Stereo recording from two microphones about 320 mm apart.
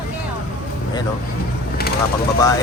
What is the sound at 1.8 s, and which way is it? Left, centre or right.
Vehicle, left.